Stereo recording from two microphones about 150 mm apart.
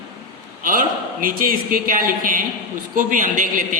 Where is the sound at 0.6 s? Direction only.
65° right (ahead or behind).